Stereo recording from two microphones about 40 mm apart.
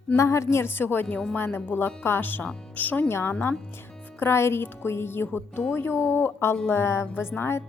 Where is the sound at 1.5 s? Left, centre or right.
Left.